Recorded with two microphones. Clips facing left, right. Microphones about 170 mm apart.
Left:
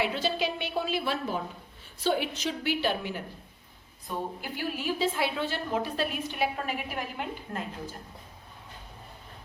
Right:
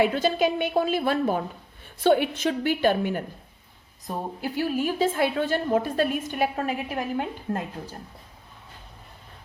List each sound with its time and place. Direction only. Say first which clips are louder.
0.0 s a woman's voice: right 7 dB; 50° right (ahead or behind)
4.0 s a woman's voice: right 4 dB; 40° right (ahead or behind)